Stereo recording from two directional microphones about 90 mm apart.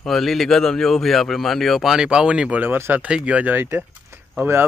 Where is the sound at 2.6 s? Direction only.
20° right (ahead or behind).